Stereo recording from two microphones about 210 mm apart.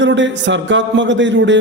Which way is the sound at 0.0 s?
60° right (ahead or behind).